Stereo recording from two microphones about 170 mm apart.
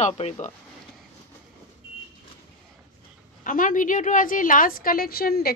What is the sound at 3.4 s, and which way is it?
A woman's voice, 55° left (ahead or behind).